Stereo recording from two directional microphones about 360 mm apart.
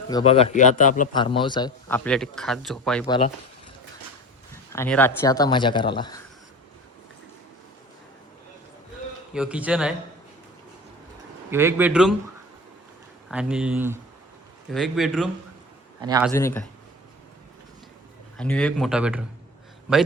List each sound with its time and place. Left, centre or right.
0.1 s speech: centre
4.7 s speech: centre
9.3 s speech: centre
11.5 s speech: centre
13.2 s a man's voice: centre
16.3 s speech: centre
18.3 s speech: centre